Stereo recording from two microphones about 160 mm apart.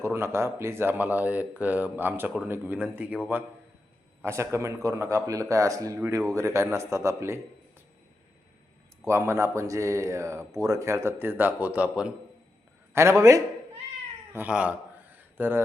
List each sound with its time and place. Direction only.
0.0 s speech: 15° right (ahead or behind)
4.2 s a man's voice: 15° right (ahead or behind)
9.0 s a man's voice: 20° right (ahead or behind)
12.9 s a man's voice: 15° right (ahead or behind)
14.3 s a sound: 10° right (ahead or behind)